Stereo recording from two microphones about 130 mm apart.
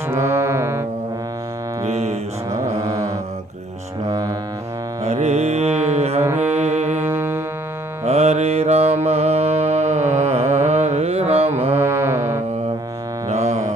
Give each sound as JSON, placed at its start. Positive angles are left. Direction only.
{"t": 0.1, "sound": "music", "side_deg": -20}
{"t": 1.9, "sound": "music", "side_deg": -55}
{"t": 2.5, "sound": "music", "side_deg": -25}
{"t": 5.0, "sound": "music", "side_deg": -55}
{"t": 6.2, "sound": "music", "side_deg": -15}
{"t": 6.5, "sound": "music", "side_deg": -60}
{"t": 7.0, "sound": "music", "side_deg": -15}
{"t": 8.0, "sound": "mantra", "side_deg": -55}
{"t": 11.7, "sound": "mantra", "side_deg": -20}
{"t": 13.3, "sound": "music", "side_deg": -55}